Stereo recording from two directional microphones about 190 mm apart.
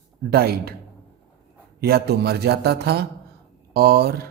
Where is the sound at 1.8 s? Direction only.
55° right (ahead or behind).